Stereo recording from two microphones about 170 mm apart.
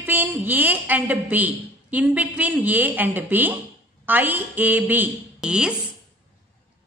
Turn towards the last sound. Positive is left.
turn(degrees=-5)  # may be behind; listen again after turning